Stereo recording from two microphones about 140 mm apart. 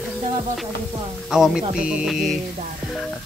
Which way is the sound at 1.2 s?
5° right (ahead or behind).